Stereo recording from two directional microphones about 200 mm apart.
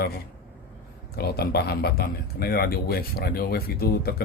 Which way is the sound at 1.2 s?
50° left (ahead or behind).